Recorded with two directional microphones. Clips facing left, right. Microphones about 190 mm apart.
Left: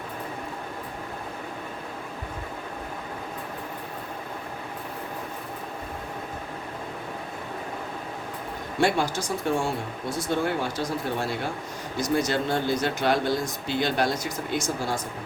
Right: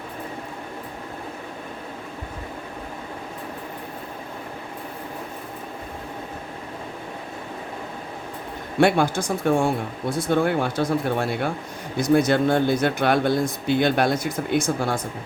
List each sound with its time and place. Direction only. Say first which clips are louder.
8.8 s speech: right 5 dB; 55° right (ahead or behind)